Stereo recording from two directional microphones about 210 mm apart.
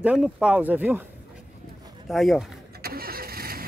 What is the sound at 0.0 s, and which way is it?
Speech, 5° right (ahead or behind).